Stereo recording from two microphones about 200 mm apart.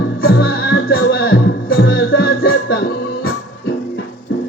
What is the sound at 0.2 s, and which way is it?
Music, 50° left (ahead or behind).